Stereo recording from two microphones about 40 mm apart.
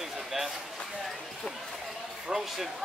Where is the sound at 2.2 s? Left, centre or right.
Centre.